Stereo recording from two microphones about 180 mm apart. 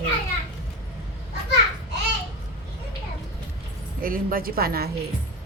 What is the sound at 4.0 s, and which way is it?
Speech, 55° right (ahead or behind).